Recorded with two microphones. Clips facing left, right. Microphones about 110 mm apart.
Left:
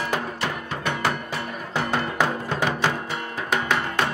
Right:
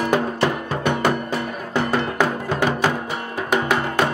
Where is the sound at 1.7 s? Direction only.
10° right (ahead or behind).